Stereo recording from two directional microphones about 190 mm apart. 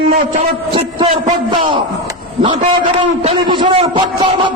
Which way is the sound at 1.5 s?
25° right (ahead or behind).